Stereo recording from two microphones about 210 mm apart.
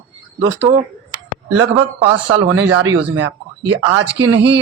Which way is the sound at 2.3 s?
75° right (ahead or behind).